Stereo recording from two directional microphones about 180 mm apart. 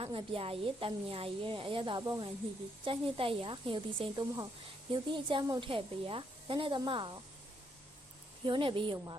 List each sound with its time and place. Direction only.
0.0 s speech: 30° right (ahead or behind)
8.4 s speech: 30° right (ahead or behind)